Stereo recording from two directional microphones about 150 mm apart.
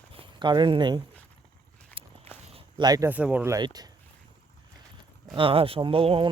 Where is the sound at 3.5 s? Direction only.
25° right (ahead or behind).